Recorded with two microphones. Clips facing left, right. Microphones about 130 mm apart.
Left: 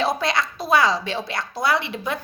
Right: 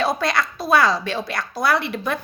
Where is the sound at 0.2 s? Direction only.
20° left (ahead or behind).